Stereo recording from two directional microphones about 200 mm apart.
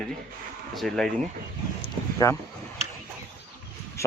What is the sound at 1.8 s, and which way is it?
Speech, 15° left (ahead or behind).